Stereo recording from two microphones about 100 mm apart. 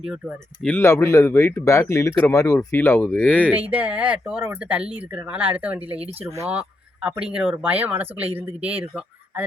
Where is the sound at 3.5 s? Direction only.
15° right (ahead or behind).